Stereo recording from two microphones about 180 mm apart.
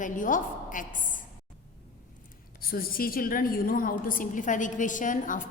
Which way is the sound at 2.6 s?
55° left (ahead or behind).